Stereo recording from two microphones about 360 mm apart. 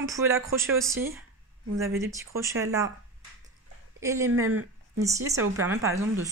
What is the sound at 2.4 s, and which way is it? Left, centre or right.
Speech, centre.